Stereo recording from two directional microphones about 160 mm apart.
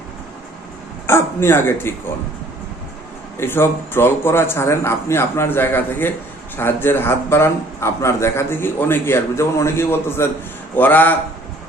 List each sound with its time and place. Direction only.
1.0 s a man's voice: 15° left (ahead or behind)
3.3 s a man's voice: 15° left (ahead or behind)